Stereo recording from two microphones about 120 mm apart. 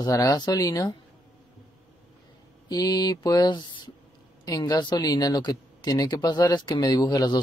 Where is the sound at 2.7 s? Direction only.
35° left (ahead or behind).